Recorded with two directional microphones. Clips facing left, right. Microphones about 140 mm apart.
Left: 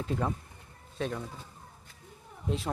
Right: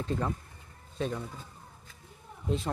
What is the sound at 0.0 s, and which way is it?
Speech, 5° left (ahead or behind).